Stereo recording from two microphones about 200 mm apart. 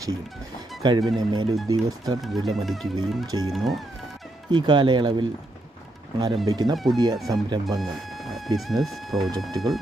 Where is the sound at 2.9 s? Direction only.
20° right (ahead or behind).